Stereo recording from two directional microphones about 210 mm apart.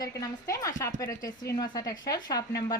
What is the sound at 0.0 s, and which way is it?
A woman's voice, 15° left (ahead or behind).